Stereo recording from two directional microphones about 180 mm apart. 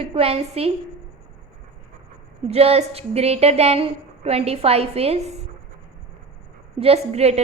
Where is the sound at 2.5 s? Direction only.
35° right (ahead or behind).